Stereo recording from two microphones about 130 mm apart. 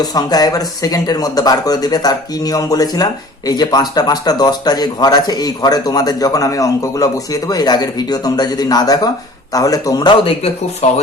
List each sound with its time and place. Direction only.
0.0 s speech: 30° left (ahead or behind)
10.8 s speech: 55° left (ahead or behind)